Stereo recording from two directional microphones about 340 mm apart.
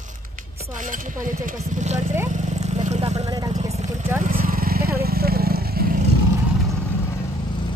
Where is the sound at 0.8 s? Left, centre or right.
Right.